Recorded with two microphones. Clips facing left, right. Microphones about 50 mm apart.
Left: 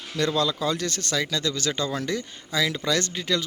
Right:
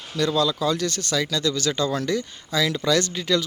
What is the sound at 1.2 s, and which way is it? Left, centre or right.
Speech, left.